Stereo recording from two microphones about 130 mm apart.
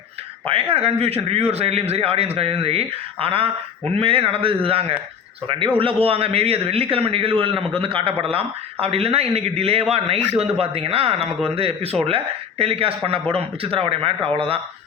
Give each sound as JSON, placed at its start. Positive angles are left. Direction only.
{"t": 0.4, "sound": "a man's voice", "side_deg": -45}